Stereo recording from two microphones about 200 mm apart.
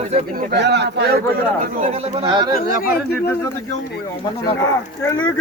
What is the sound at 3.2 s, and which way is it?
Speech, 10° left (ahead or behind).